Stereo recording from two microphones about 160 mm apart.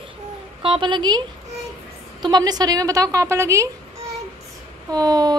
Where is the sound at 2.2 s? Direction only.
25° right (ahead or behind).